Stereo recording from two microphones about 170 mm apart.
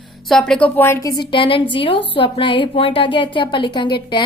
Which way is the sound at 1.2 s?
30° left (ahead or behind).